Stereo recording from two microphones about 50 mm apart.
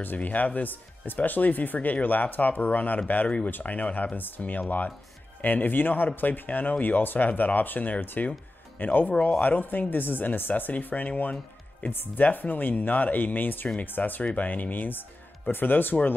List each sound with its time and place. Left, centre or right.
0.0 s speech: left